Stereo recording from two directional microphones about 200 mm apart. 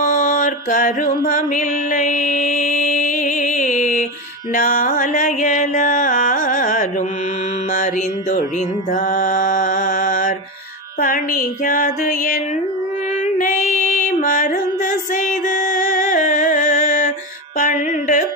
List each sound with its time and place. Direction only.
0.0 s mantra: 40° left (ahead or behind)
4.5 s music: 45° left (ahead or behind)
13.4 s female singing: 40° left (ahead or behind)
17.6 s music: 40° left (ahead or behind)